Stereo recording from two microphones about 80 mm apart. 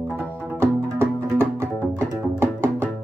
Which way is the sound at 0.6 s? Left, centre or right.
Right.